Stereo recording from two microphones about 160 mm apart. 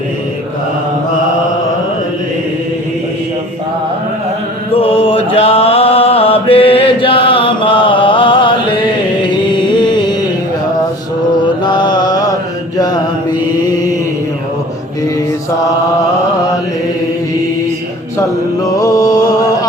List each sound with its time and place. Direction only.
4.7 s mantra: 35° left (ahead or behind)
9.5 s a sound: 30° left (ahead or behind)
11.6 s mantra: 25° left (ahead or behind)
18.8 s mantra: 25° left (ahead or behind)